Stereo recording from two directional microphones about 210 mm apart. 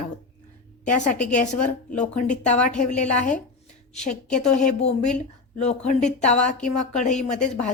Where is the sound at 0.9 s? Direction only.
35° left (ahead or behind).